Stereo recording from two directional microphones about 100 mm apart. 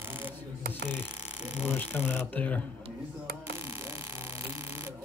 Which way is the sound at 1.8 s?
25° left (ahead or behind).